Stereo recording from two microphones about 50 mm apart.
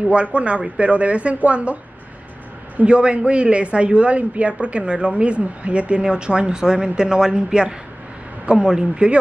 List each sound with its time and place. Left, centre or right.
0.0 s speech: right
2.8 s speech: right